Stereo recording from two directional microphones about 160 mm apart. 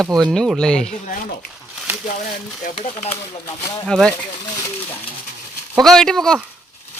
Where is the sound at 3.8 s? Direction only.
5° left (ahead or behind).